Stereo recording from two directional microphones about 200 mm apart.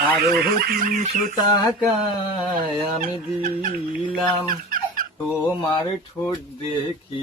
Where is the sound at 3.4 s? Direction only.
45° right (ahead or behind).